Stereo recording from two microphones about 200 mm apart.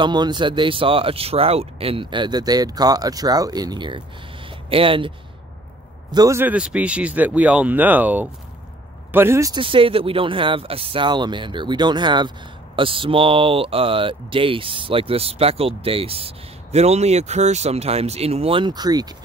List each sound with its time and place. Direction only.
0.0 s speech: 20° right (ahead or behind)
6.1 s speech: 15° right (ahead or behind)